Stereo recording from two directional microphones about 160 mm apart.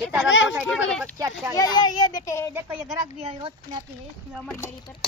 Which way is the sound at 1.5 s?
25° left (ahead or behind).